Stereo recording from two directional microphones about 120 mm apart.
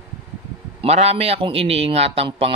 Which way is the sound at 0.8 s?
60° right (ahead or behind).